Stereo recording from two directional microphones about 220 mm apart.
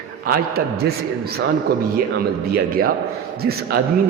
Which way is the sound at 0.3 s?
45° right (ahead or behind).